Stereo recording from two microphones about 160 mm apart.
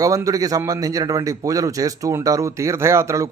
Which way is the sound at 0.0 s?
20° right (ahead or behind).